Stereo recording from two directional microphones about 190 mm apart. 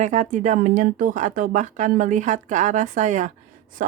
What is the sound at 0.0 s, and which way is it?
Speech, 40° right (ahead or behind).